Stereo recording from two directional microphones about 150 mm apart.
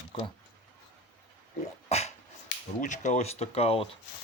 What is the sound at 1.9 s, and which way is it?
Dog, 45° left (ahead or behind).